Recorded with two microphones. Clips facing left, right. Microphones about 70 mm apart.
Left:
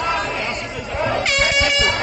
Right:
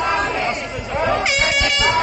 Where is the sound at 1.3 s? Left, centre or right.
Centre.